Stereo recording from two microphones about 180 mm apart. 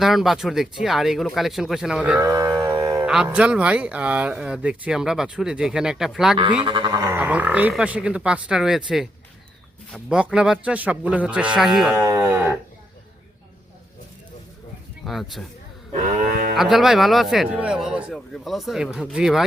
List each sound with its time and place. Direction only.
0.0 s speech: centre (ahead or behind)
2.2 s music: 20° right (ahead or behind)
3.1 s speech: 5° right (ahead or behind)
6.6 s speech: 25° right (ahead or behind); by 11.9 s centre (ahead or behind)
11.9 s cattle: 15° right (ahead or behind)
15.0 s speech: centre (ahead or behind)
16.0 s speech: 45° right (ahead or behind)
16.6 s speech: centre (ahead or behind)